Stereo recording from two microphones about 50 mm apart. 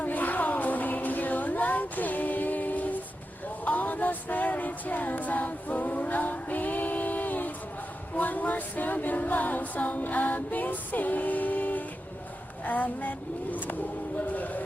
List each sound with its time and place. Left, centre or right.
0.0 s music: left
8.1 s a capella: left
12.6 s speech: left